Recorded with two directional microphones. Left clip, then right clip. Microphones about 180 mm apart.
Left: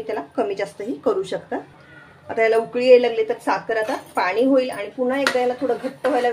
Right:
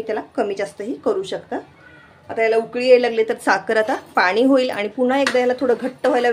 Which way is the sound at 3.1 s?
40° right (ahead or behind).